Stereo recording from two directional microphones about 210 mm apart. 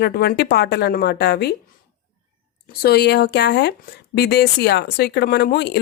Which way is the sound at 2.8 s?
50° left (ahead or behind).